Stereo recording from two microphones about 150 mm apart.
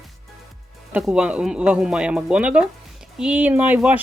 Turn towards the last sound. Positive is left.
turn(degrees=-10)  # may be behind; listen again after turning